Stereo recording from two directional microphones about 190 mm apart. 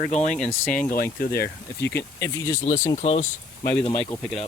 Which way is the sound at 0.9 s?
50° left (ahead or behind).